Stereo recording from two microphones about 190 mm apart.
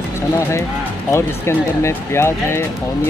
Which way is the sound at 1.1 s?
15° left (ahead or behind).